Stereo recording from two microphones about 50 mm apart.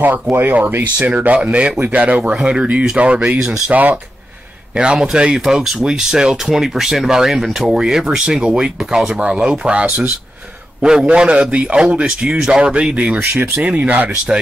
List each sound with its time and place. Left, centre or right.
0.0 s a man's voice: right
4.7 s a man's voice: centre